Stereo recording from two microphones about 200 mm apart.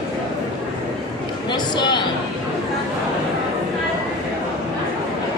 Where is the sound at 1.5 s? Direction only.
20° left (ahead or behind).